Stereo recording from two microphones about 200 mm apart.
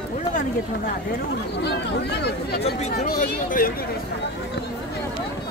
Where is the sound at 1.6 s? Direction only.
55° left (ahead or behind).